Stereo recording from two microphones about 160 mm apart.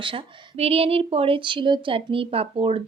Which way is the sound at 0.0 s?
35° right (ahead or behind).